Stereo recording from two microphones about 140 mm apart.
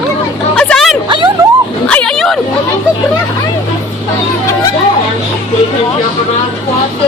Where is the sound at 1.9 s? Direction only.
5° left (ahead or behind).